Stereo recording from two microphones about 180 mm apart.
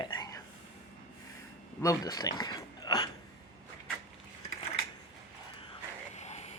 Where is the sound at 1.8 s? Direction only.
20° left (ahead or behind).